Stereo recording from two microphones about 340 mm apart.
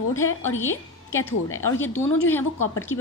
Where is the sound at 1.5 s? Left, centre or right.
Left.